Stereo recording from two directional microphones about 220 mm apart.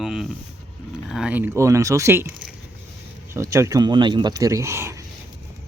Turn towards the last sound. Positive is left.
turn(degrees=-10)  # may be behind; listen again after turning